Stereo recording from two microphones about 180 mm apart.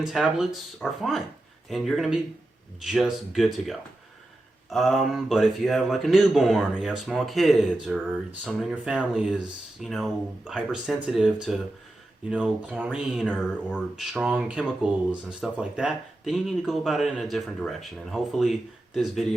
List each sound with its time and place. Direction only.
0.0 s a man's voice: 5° right (ahead or behind)